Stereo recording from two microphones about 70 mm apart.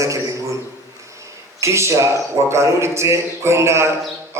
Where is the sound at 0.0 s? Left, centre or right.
Right.